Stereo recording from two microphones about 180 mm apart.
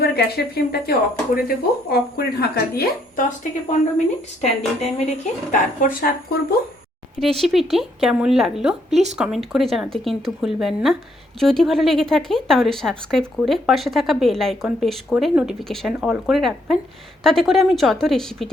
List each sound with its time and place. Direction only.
0.0 s speech: 60° left (ahead or behind)
3.2 s a woman's voice: 45° left (ahead or behind)
5.5 s a woman's voice: 50° left (ahead or behind)
7.2 s speech: centre (ahead or behind)